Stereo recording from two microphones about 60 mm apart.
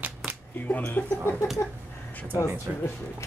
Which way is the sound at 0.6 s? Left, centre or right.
Left.